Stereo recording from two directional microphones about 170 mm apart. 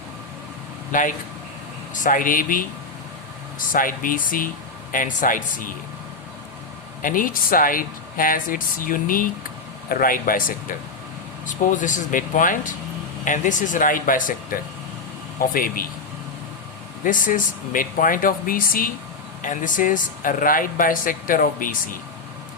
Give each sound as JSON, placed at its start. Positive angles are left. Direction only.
{"t": 0.9, "sound": "speech", "side_deg": 50}
{"t": 3.7, "sound": "speech", "side_deg": 55}
{"t": 7.0, "sound": "speech", "side_deg": 55}
{"t": 17.0, "sound": "speech", "side_deg": 50}